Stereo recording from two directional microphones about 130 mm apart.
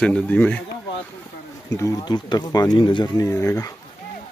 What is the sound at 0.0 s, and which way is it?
Speech, 10° left (ahead or behind).